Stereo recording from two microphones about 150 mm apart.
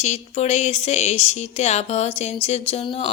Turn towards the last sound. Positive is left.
turn(degrees=40)  # may be behind; listen again after turning